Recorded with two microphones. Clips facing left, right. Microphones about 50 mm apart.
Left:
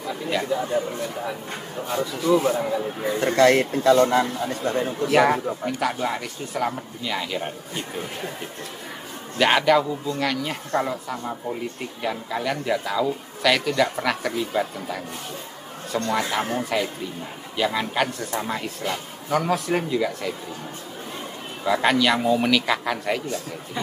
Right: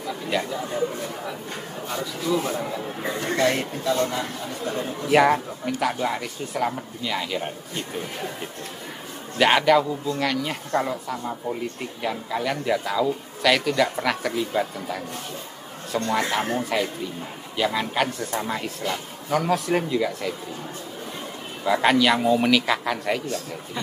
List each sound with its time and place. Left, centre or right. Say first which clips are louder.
0.0 s speech: even; centre
2.3 s a man's voice: left 5 dB; centre
3.3 s speech: left 7 dB; left
4.6 s a man's voice: left 4 dB; left
5.1 s speech: right 1 dB; centre
9.4 s speech: even; centre
16.1 s speech: right 1 dB; centre
21.6 s speech: right 1 dB; centre